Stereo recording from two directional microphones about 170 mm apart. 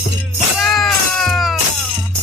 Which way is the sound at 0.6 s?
Centre (ahead or behind).